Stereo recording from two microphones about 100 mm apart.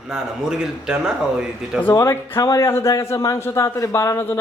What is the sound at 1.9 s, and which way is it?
A man's voice, 35° left (ahead or behind).